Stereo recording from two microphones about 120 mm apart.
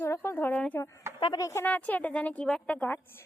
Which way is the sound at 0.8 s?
25° left (ahead or behind).